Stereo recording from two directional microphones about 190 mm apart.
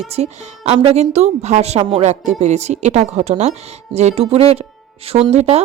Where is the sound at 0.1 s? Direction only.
35° right (ahead or behind).